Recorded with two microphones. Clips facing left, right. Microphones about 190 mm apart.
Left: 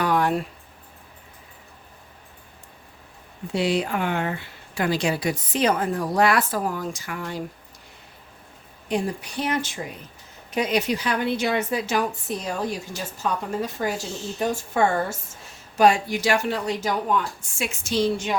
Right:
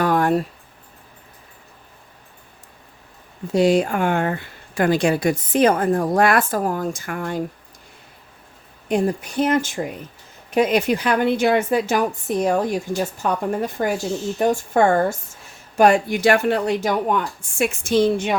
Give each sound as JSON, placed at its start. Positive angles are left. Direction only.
{"t": 0.0, "sound": "a sound", "side_deg": -45}
{"t": 3.5, "sound": "speech", "side_deg": -45}
{"t": 8.9, "sound": "speech", "side_deg": -50}